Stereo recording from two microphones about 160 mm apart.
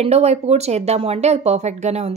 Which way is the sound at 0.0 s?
40° right (ahead or behind).